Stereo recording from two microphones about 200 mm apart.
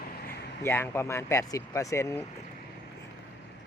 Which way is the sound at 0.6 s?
10° left (ahead or behind).